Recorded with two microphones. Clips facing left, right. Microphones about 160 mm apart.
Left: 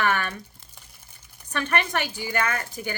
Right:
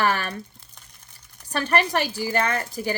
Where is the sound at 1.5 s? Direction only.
35° right (ahead or behind).